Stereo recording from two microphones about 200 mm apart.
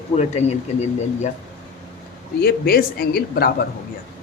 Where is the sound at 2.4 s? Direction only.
50° left (ahead or behind).